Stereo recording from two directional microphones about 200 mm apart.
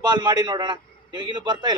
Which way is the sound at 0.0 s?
20° right (ahead or behind).